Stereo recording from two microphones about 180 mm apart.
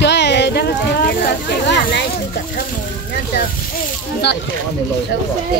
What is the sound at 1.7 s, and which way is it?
Speech, 70° left (ahead or behind).